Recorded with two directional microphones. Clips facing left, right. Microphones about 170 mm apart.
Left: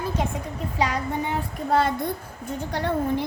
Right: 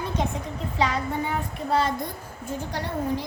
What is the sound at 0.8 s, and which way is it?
Speech, 10° left (ahead or behind).